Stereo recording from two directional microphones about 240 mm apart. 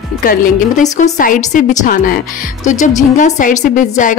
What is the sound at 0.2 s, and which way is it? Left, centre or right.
A woman's voice, left.